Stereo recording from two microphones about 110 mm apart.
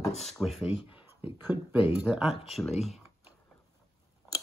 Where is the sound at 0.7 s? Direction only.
60° left (ahead or behind).